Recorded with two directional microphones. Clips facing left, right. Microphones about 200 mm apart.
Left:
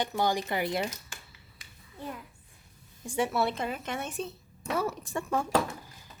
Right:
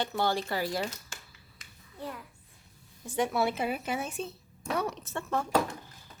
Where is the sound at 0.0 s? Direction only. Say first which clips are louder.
Left 1 dB; 15° left (ahead or behind).